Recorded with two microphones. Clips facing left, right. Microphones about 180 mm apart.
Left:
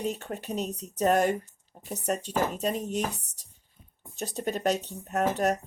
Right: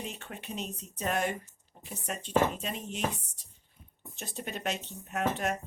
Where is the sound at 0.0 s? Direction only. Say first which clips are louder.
Left 9 dB; 40° left (ahead or behind).